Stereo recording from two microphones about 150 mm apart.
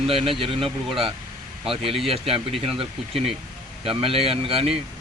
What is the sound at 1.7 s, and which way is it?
Speech, 40° right (ahead or behind).